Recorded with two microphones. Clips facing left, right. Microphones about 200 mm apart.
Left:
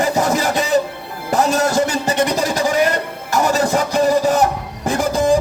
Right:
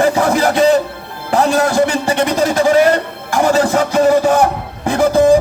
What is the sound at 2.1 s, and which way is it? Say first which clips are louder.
Speech: right 3 dB; 60° right (ahead or behind).